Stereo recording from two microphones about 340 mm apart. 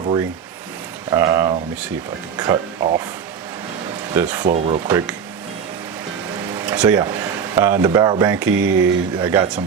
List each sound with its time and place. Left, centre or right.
1.1 s a sound: centre
2.3 s speech: centre
4.1 s speech: centre
4.5 s speech: centre
4.9 s speech: centre
6.4 s speech: centre
8.5 s speech: right
8.8 s speech: centre